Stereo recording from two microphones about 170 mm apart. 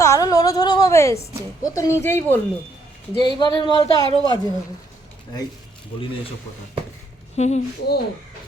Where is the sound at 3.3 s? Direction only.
25° left (ahead or behind).